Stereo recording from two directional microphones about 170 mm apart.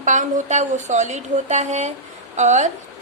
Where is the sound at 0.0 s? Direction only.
45° right (ahead or behind).